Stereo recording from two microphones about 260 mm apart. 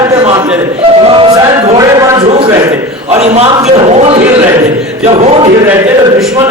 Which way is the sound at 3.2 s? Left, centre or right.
Right.